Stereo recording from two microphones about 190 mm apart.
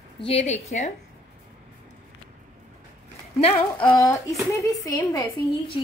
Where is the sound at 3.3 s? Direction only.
30° left (ahead or behind).